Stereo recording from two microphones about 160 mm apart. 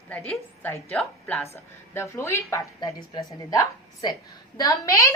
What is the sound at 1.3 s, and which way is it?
A woman's voice, 15° left (ahead or behind).